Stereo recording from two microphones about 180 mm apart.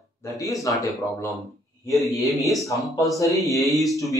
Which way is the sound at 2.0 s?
Centre (ahead or behind).